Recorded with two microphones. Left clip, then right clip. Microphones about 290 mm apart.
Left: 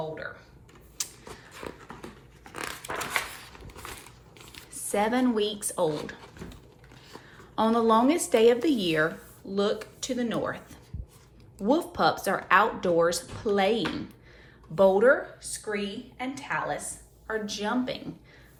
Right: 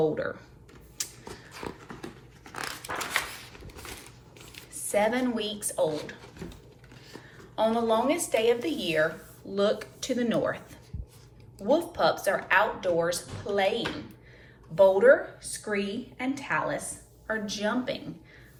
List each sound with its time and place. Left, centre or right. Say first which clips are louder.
0.0 s speech: right 8 dB; centre
1.0 s a sound: left 1 dB; centre
1.6 s dog: right 1 dB; centre
4.5 s speech: right 1 dB; centre
7.5 s speech: left 2 dB; centre